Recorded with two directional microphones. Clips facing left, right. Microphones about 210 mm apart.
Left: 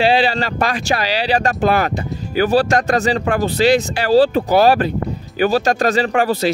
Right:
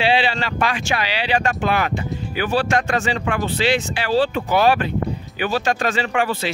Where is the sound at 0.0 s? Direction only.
40° left (ahead or behind).